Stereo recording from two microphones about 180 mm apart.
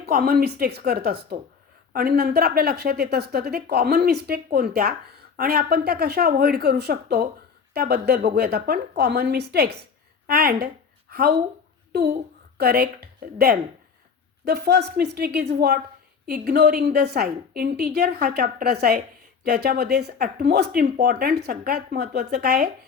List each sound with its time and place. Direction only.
0.0 s a woman's voice: 60° right (ahead or behind)